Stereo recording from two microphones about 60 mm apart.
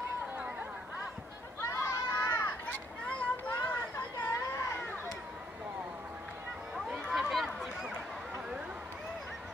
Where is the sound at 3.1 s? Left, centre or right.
Left.